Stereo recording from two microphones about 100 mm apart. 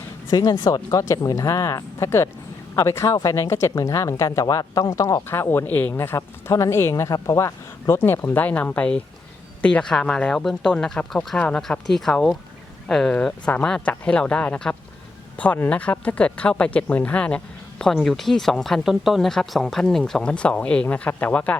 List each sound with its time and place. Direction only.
0.3 s speech: 40° left (ahead or behind); by 21.6 s 15° left (ahead or behind)